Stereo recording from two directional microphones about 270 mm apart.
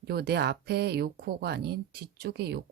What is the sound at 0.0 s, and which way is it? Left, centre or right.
Speech, right.